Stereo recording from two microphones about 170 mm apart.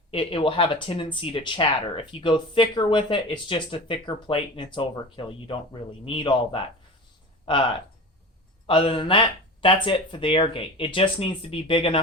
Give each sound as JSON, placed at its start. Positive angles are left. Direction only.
{"t": 0.1, "sound": "speech", "side_deg": 30}
{"t": 8.6, "sound": "speech", "side_deg": 30}